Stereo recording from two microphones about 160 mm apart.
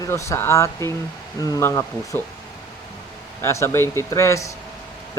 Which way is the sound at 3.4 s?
15° left (ahead or behind).